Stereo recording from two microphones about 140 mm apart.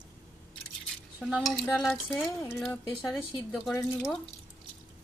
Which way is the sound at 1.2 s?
Centre (ahead or behind).